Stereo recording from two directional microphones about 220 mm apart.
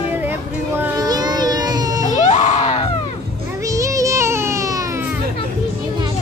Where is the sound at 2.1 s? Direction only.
30° left (ahead or behind).